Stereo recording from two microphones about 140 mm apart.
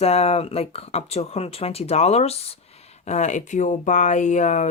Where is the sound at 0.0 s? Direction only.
50° left (ahead or behind).